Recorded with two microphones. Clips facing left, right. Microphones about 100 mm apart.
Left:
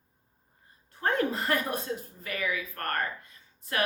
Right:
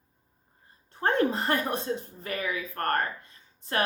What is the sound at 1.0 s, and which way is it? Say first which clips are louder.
Speech: right 3 dB; 35° right (ahead or behind).